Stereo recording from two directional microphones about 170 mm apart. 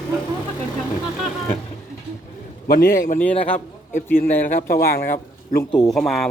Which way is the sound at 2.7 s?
55° left (ahead or behind).